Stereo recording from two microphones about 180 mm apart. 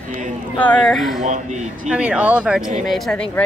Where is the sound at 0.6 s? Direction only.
5° left (ahead or behind).